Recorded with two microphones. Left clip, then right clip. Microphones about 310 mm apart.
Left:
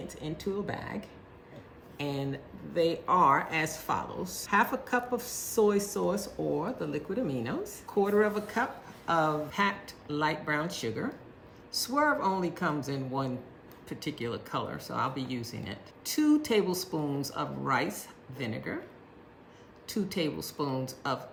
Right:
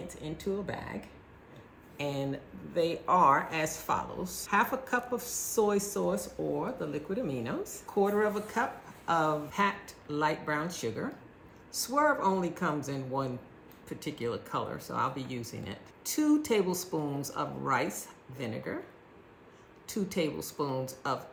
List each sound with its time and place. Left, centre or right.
0.1 s speech: centre
2.0 s speech: centre
19.9 s speech: centre